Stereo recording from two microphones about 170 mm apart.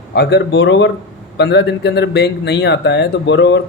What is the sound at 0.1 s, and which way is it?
A man's voice, 80° left.